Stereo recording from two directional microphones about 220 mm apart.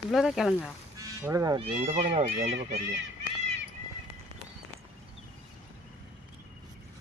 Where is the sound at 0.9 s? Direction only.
15° right (ahead or behind); by 2.5 s 35° right (ahead or behind).